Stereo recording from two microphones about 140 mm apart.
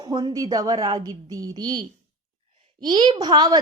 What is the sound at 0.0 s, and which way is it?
A woman's voice, 30° right (ahead or behind).